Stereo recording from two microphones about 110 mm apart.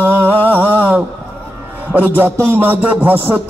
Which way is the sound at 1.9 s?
15° right (ahead or behind).